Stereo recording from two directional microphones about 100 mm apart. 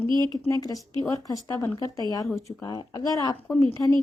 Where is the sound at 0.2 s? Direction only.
35° left (ahead or behind).